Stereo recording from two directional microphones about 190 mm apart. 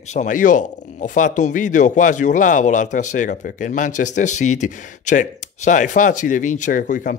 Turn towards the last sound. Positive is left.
turn(degrees=40)  # may be behind; listen again after turning